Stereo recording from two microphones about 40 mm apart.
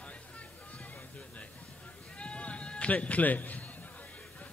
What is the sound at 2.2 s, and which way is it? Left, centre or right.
Sheep, left.